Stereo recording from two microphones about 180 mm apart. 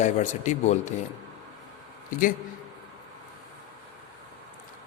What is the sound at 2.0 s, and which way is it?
Speech, 50° left (ahead or behind).